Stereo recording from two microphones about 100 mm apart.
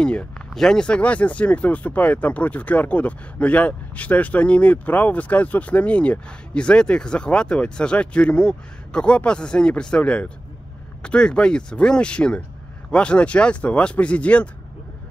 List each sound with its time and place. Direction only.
0.0 s speech: 10° left (ahead or behind)